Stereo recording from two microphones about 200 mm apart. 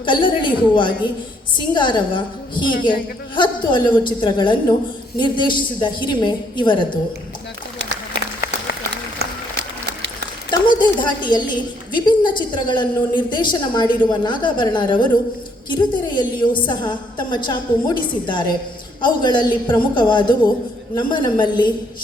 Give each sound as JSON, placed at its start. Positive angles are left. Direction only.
{"t": 0.0, "sound": "a woman's voice", "side_deg": 25}
{"t": 9.1, "sound": "a sound", "side_deg": -60}
{"t": 10.5, "sound": "a woman's voice", "side_deg": 20}